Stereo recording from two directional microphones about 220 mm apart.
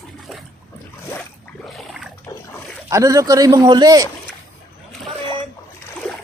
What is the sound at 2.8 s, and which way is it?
Speech, 15° right (ahead or behind).